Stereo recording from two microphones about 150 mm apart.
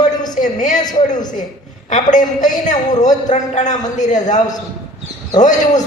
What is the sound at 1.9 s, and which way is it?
A man's voice, 55° left (ahead or behind).